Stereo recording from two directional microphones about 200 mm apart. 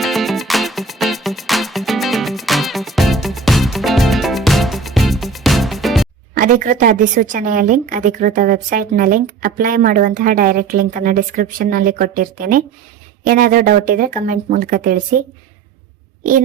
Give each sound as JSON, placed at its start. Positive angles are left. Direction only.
{"t": 0.0, "sound": "music", "side_deg": 0}
{"t": 6.3, "sound": "a woman's voice", "side_deg": -45}